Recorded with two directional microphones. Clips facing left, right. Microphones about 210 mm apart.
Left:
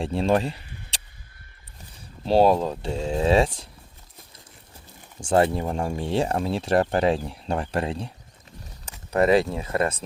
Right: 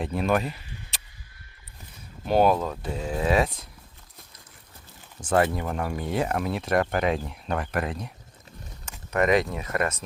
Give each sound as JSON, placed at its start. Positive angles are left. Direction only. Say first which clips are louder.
{"t": 0.0, "sound": "speech", "louder": "left 3 dB", "side_deg": 30}
{"t": 2.2, "sound": "speech", "louder": "left 3 dB", "side_deg": 30}
{"t": 5.2, "sound": "speech", "louder": "left 3 dB", "side_deg": 30}